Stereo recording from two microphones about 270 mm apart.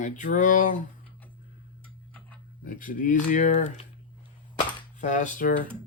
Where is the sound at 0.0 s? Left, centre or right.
Left.